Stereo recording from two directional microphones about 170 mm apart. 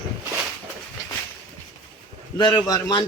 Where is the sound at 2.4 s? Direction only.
25° left (ahead or behind).